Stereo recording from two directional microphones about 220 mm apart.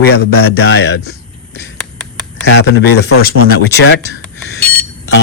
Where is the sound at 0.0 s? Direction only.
45° left (ahead or behind).